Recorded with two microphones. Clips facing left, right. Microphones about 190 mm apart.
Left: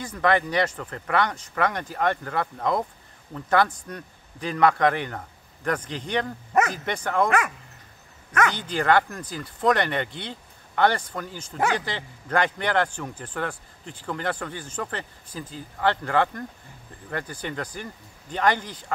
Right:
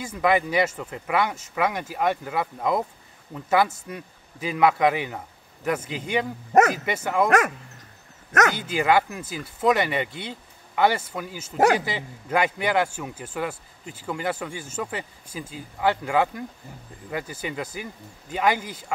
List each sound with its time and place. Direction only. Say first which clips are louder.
0.0 s speech: right 1 dB; 10° right (ahead or behind)
7.2 s speech: right 3 dB; 45° right (ahead or behind)
8.5 s speech: right 1 dB; 5° right (ahead or behind)